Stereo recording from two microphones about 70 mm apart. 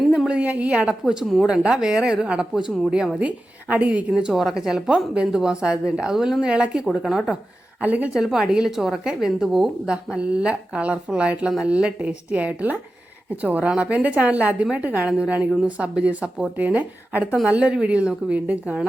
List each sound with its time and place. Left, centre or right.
0.3 s a woman's voice: centre
1.5 s a woman's voice: centre
4.2 s a woman's voice: centre
7.8 s a woman's voice: right
8.1 s a woman's voice: centre